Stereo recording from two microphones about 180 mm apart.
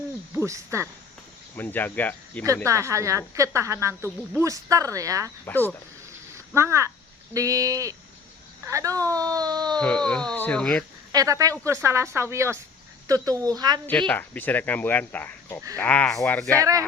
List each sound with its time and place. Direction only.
0.3 s speech: 15° right (ahead or behind)
1.5 s speech: 10° left (ahead or behind)
2.6 s speech: 15° right (ahead or behind)
5.5 s speech: 10° left (ahead or behind)
6.5 s speech: 15° right (ahead or behind)
9.7 s speech: 5° left (ahead or behind)
11.1 s speech: 20° right (ahead or behind)
14.1 s speech: 10° left (ahead or behind)
16.6 s speech: 20° right (ahead or behind)